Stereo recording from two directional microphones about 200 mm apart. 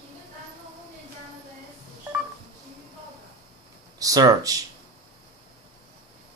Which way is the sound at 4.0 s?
20° right (ahead or behind).